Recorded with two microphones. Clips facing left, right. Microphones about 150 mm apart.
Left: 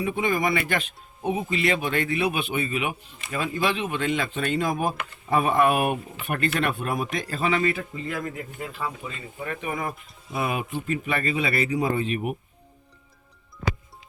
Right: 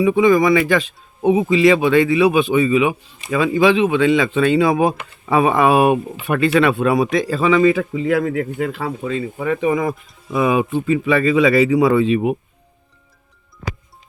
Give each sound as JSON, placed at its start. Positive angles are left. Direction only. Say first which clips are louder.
{"t": 0.0, "sound": "speech", "louder": "right 11 dB", "side_deg": -90}
{"t": 10.7, "sound": "speech", "louder": "right 10 dB", "side_deg": -80}